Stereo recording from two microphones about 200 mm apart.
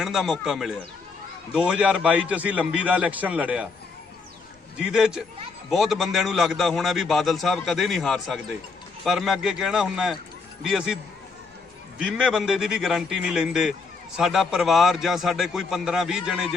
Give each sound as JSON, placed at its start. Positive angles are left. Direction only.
{"t": 0.0, "sound": "a man's voice", "side_deg": 0}
{"t": 4.8, "sound": "a man's voice", "side_deg": -5}
{"t": 11.9, "sound": "a man's voice", "side_deg": -5}